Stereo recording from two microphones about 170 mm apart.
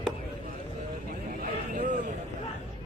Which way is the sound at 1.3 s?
60° right (ahead or behind).